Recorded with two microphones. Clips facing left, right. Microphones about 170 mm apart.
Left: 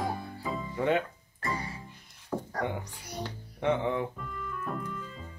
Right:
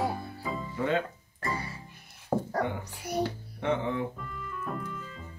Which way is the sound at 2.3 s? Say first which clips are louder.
Right 5 dB; 50° right (ahead or behind).